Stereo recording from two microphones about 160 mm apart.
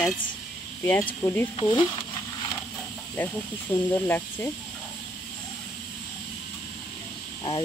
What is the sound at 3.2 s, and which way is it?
Speech, 10° left (ahead or behind).